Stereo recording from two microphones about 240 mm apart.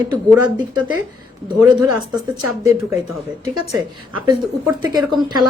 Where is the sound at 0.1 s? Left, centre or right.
Centre.